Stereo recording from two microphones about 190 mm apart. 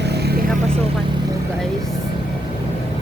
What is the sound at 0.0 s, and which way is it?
Vehicle, 60° right (ahead or behind).